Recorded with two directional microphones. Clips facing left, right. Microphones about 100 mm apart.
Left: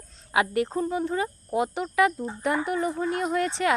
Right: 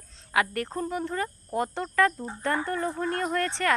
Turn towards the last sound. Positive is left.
turn(degrees=15)  # may be behind; listen again after turning